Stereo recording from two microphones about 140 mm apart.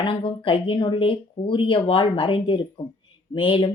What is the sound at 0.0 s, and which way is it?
Speech, 40° left (ahead or behind).